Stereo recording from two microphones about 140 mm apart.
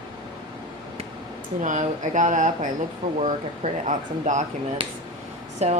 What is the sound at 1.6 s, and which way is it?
Speech, 65° right (ahead or behind).